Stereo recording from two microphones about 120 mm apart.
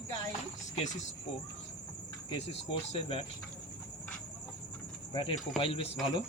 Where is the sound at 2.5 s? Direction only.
55° left (ahead or behind).